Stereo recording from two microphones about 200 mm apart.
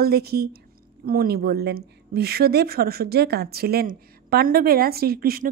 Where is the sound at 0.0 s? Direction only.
50° right (ahead or behind).